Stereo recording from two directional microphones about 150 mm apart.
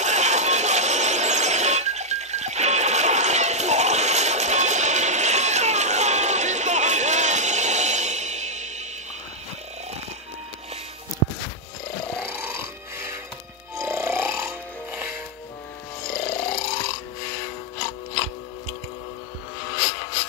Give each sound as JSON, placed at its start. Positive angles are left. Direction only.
{"t": 0.0, "sound": "a sound", "side_deg": -50}
{"t": 13.7, "sound": "music", "side_deg": -15}
{"t": 16.1, "sound": "music", "side_deg": 90}